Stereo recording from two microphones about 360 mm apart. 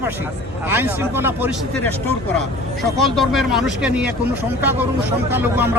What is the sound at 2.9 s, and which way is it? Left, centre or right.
A man's voice, centre.